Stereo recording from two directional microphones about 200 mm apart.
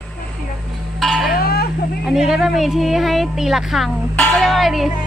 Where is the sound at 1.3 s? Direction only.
50° left (ahead or behind).